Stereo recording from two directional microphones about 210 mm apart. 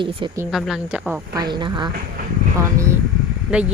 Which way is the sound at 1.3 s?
20° right (ahead or behind).